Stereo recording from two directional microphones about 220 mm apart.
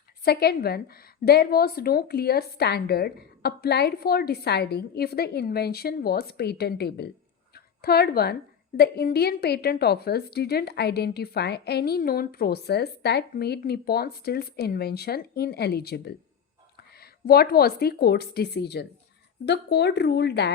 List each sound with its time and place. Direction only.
0.3 s a woman's voice: 45° left (ahead or behind)